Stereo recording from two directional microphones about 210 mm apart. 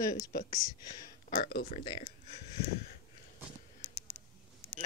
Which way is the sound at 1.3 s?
40° left (ahead or behind).